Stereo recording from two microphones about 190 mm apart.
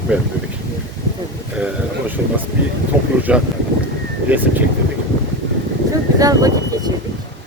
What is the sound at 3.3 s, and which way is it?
Speech, 5° right (ahead or behind).